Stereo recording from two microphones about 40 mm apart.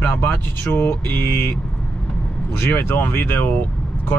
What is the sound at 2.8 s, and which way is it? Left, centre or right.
Speech, left.